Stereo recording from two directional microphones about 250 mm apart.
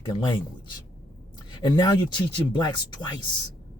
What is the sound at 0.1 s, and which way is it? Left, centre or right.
Speech, centre.